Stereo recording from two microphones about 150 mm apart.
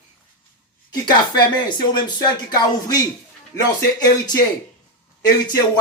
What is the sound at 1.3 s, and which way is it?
Speech, 30° left (ahead or behind).